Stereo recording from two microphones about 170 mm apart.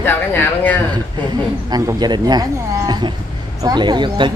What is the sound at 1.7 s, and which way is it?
Speech, 25° right (ahead or behind).